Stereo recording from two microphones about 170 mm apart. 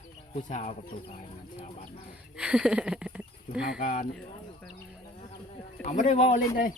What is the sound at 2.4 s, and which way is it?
Speech, 5° right (ahead or behind).